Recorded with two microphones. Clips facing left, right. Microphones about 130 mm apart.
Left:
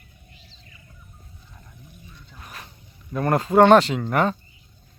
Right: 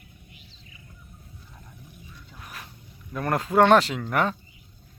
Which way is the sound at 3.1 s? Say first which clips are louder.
Left 4 dB; centre (ahead or behind).